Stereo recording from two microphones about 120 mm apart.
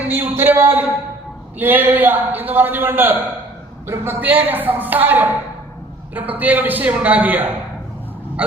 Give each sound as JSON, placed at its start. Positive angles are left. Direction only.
{"t": 0.1, "sound": "a man's voice", "side_deg": -15}